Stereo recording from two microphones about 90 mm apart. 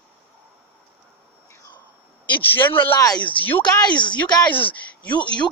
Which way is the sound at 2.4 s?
20° left (ahead or behind).